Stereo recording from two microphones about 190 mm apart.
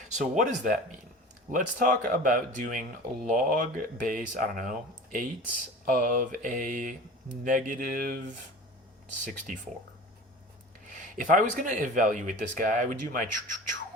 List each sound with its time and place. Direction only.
0.1 s speech: 40° right (ahead or behind)
11.2 s speech: 45° right (ahead or behind)